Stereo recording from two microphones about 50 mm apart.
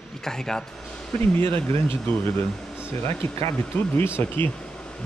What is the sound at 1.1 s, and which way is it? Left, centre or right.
Speech, left.